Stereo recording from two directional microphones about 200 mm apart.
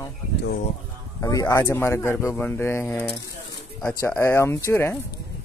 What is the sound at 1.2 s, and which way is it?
Speech, 15° left (ahead or behind).